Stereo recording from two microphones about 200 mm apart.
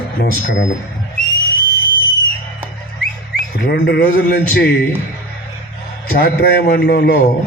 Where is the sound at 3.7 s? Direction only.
55° left (ahead or behind).